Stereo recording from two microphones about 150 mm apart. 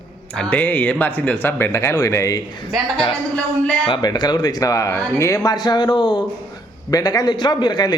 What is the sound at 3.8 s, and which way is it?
A man's voice, 30° left (ahead or behind).